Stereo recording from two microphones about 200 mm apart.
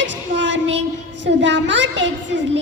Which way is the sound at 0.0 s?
65° right (ahead or behind).